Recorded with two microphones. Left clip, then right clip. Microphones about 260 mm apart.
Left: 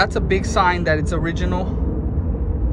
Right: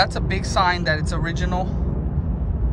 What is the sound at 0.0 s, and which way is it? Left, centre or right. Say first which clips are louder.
Speech: left 3 dB; centre.